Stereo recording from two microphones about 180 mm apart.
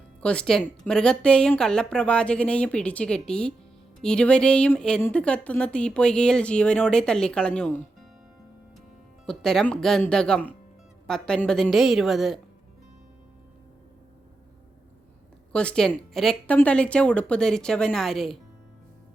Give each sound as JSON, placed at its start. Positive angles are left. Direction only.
{"t": 0.2, "sound": "speech", "side_deg": 5}
{"t": 9.2, "sound": "speech", "side_deg": 5}
{"t": 15.5, "sound": "speech", "side_deg": 5}